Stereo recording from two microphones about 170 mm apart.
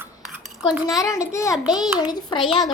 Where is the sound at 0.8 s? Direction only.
20° left (ahead or behind).